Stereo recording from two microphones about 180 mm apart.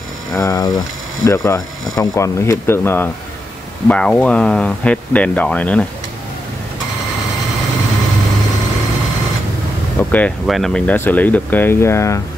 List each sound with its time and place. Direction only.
0.4 s speech: 20° left (ahead or behind)
10.1 s speech: 5° left (ahead or behind)